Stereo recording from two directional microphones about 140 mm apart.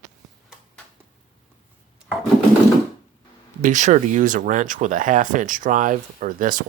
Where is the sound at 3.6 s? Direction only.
60° right (ahead or behind).